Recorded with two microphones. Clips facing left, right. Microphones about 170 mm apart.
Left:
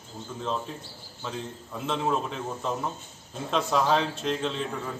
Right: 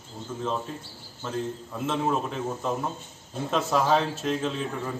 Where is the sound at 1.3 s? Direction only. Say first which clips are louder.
Right 5 dB; centre (ahead or behind).